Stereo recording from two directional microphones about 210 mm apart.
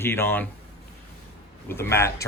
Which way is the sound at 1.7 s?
10° left (ahead or behind).